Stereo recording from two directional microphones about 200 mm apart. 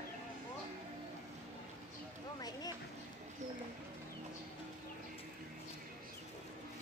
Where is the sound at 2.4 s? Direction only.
20° left (ahead or behind).